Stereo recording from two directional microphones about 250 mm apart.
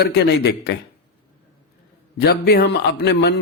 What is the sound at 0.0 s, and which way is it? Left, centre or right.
Speech, left.